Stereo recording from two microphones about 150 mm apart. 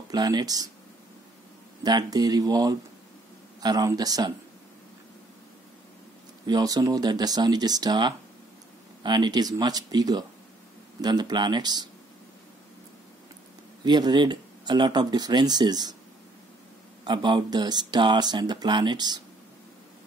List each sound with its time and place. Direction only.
0.1 s speech: 25° right (ahead or behind)
1.8 s speech: 25° right (ahead or behind)
6.4 s speech: 25° right (ahead or behind)
13.8 s speech: 30° right (ahead or behind)
17.0 s speech: 30° right (ahead or behind)